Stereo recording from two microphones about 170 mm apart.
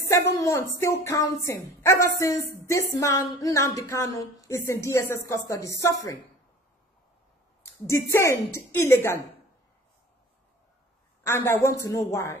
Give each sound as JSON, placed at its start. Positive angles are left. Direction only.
{"t": 0.4, "sound": "a woman's voice", "side_deg": 15}
{"t": 7.8, "sound": "a woman's voice", "side_deg": 15}
{"t": 11.2, "sound": "a woman's voice", "side_deg": 15}